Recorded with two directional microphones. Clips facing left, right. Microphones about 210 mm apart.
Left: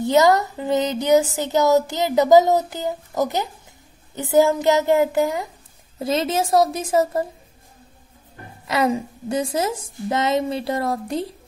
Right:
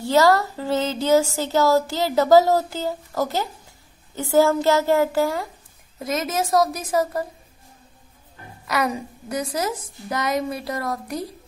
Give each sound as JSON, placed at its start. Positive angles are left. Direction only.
{"t": 0.0, "sound": "speech", "side_deg": 20}
{"t": 5.9, "sound": "a woman's voice", "side_deg": 30}
{"t": 8.6, "sound": "a woman's voice", "side_deg": 25}